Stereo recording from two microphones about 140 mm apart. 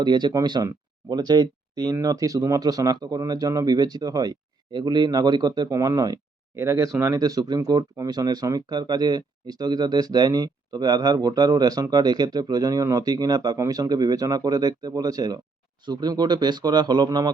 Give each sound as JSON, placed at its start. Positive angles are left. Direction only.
{"t": 0.0, "sound": "a man's voice", "side_deg": -30}